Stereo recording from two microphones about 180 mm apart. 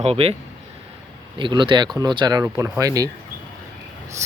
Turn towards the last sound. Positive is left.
turn(degrees=-20)  # may be behind; listen again after turning